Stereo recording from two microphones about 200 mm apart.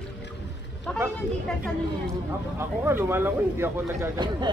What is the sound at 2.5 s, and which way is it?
Speech, 10° right (ahead or behind).